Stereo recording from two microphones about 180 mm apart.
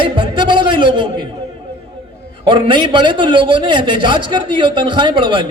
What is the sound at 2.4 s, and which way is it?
A man's voice, 25° right (ahead or behind).